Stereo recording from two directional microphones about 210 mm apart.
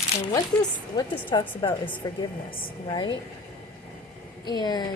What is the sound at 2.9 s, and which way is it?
Speech, 20° left (ahead or behind).